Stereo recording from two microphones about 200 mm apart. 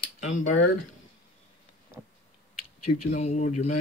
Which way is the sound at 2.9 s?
35° left (ahead or behind).